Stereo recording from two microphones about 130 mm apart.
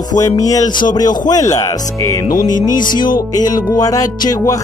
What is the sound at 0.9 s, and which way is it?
Music, 30° left (ahead or behind).